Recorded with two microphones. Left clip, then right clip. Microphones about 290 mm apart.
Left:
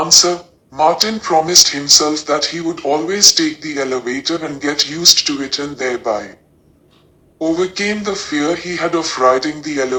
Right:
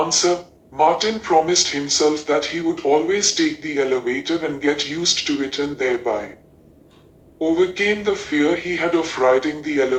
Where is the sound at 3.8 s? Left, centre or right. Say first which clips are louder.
Even; left.